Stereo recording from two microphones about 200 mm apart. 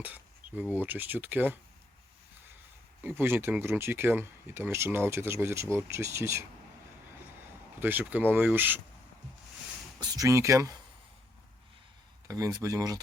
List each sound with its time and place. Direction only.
0.0 s speech: 10° right (ahead or behind)
3.0 s speech: 10° right (ahead or behind)
7.8 s speech: 10° right (ahead or behind)
10.0 s speech: 20° right (ahead or behind)
12.3 s speech: 15° right (ahead or behind)